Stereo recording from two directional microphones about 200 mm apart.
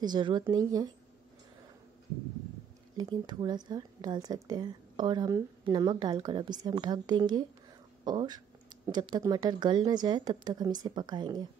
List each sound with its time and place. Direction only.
0.0 s a woman's voice: 20° right (ahead or behind)
3.0 s a woman's voice: 20° right (ahead or behind)